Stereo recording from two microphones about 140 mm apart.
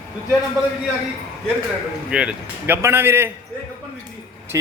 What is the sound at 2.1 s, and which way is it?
A man's voice, 10° right (ahead or behind).